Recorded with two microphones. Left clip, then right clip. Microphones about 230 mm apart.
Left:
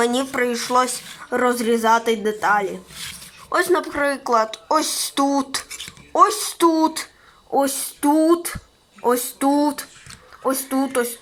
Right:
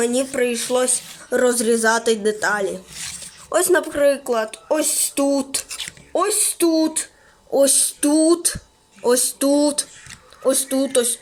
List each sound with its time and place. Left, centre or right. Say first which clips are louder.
0.0 s a woman's voice: even; centre
3.5 s a woman's voice: right 1 dB; right